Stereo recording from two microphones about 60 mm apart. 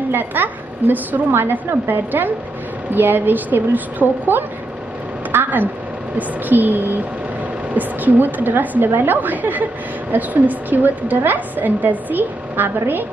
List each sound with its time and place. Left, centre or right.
0.1 s a woman's voice: right